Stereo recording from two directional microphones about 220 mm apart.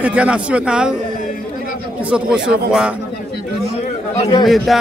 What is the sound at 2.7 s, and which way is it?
Speech, 5° right (ahead or behind).